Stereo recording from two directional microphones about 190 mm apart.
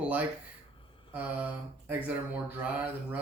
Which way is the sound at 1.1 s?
10° right (ahead or behind).